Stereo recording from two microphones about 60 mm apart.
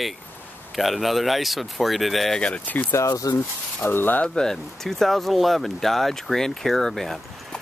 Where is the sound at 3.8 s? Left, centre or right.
Left.